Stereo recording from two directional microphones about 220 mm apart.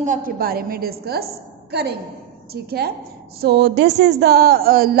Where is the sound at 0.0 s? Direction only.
35° right (ahead or behind).